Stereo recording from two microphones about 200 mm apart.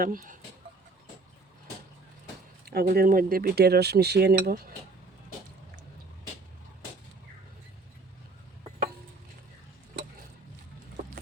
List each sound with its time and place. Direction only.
0.0 s cutlery: 45° right (ahead or behind)
2.6 s cutlery: 50° right (ahead or behind)